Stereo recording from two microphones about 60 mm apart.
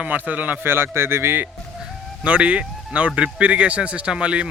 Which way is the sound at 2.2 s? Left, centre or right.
Right.